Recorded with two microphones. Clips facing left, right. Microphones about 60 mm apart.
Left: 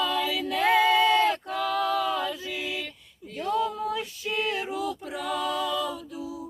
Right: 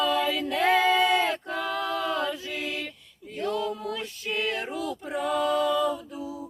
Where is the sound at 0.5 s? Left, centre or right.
Centre.